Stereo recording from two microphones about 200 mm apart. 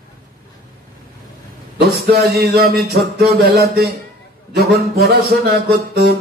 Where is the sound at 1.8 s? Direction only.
50° right (ahead or behind).